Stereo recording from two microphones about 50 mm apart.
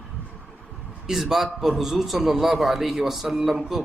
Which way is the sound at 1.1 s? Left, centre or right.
Centre.